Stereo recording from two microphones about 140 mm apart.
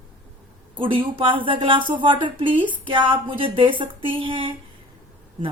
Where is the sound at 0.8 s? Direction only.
40° right (ahead or behind).